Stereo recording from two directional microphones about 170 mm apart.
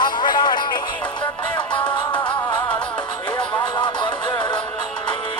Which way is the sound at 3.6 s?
25° left (ahead or behind).